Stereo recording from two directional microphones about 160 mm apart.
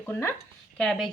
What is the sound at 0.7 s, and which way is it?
Speech, centre (ahead or behind).